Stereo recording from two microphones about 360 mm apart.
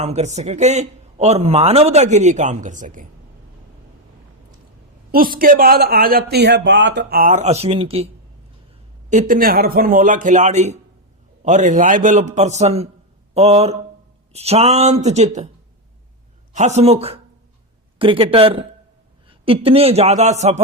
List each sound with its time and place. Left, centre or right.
0.0 s a man's voice: centre
5.1 s a man's voice: right
9.0 s a man's voice: right
16.6 s a man's voice: centre